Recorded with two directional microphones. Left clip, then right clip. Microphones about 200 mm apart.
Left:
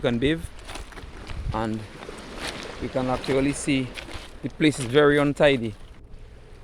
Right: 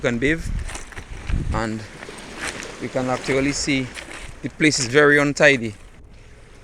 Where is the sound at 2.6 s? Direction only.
55° right (ahead or behind).